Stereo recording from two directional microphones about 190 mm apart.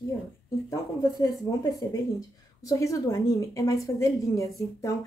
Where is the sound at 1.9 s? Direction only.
15° left (ahead or behind).